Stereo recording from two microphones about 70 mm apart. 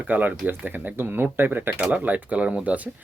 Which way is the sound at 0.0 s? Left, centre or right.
Right.